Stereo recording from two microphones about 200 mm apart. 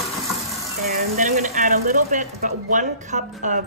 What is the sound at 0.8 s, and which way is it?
Speech, 45° right (ahead or behind).